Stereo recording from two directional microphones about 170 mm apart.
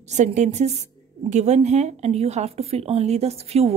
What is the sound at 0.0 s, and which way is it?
A woman's voice, 45° right (ahead or behind).